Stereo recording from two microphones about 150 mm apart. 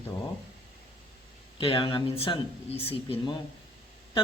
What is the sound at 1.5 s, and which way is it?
Speech, 35° left (ahead or behind).